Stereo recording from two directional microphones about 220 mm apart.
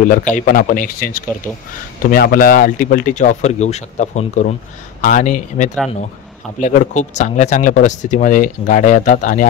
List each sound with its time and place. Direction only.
0.1 s speech: 35° left (ahead or behind)